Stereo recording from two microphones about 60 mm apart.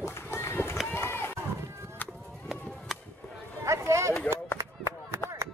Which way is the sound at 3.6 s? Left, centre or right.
Right.